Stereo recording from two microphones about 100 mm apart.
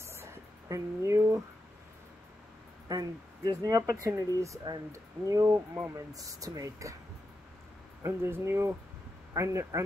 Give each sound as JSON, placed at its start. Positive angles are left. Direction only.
{"t": 0.0, "sound": "a sound", "side_deg": -25}
{"t": 2.9, "sound": "speech", "side_deg": -40}
{"t": 8.0, "sound": "speech", "side_deg": -25}